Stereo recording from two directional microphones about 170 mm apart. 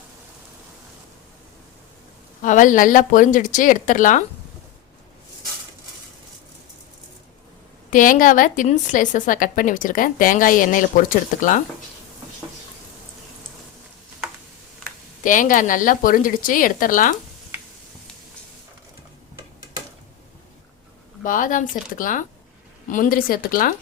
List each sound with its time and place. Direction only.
2.4 s a woman's voice: 50° left (ahead or behind)
7.9 s a woman's voice: 50° left (ahead or behind)
15.2 s a woman's voice: 50° left (ahead or behind)
21.2 s a woman's voice: 50° left (ahead or behind)